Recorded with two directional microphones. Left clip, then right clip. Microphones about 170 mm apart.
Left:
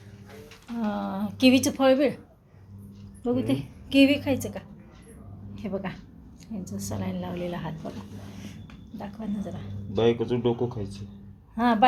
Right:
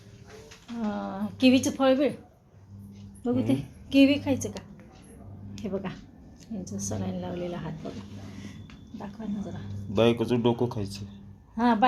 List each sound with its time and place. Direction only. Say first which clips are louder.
0.8 s a woman's voice: left 2 dB; 5° left (ahead or behind)
3.4 s a woman's voice: even; centre (ahead or behind)
5.6 s a woman's voice: left 1 dB; centre (ahead or behind)
9.0 s a woman's voice: left 2 dB; 5° left (ahead or behind)
9.9 s speech: even; 25° right (ahead or behind)
11.5 s a woman's voice: left 2 dB; centre (ahead or behind)